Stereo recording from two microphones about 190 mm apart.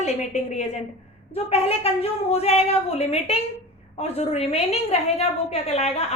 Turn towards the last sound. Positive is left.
turn(degrees=35)  # may be behind; listen again after turning